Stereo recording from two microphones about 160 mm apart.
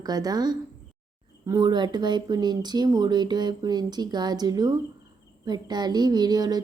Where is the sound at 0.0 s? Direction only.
25° right (ahead or behind).